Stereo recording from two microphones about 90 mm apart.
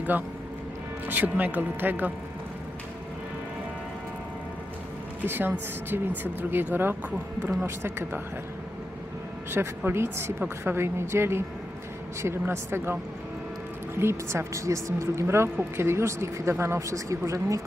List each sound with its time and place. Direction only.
1.0 s speech: 20° right (ahead or behind)
5.2 s speech: 20° right (ahead or behind)
9.5 s speech: 25° right (ahead or behind)